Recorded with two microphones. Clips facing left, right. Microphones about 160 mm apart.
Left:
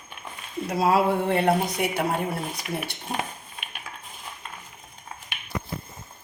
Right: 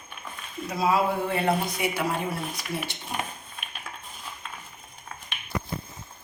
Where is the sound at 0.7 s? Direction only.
70° left (ahead or behind).